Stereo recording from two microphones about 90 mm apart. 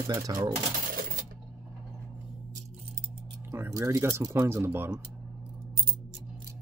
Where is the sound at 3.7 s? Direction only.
35° right (ahead or behind).